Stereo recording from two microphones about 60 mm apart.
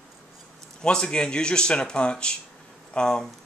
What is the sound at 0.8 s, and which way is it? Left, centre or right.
Speech, centre.